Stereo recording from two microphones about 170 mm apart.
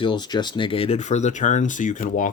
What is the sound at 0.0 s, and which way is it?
Speech, 25° left (ahead or behind).